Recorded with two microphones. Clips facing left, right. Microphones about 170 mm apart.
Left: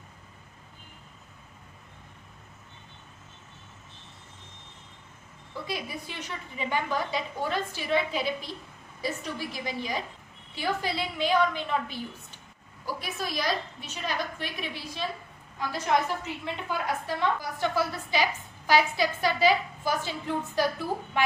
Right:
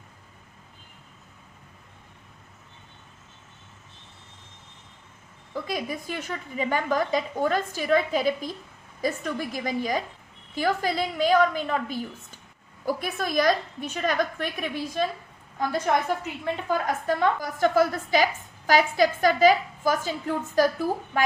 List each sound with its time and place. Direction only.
5.6 s a woman's voice: 45° right (ahead or behind)
16.6 s a woman's voice: 45° right (ahead or behind)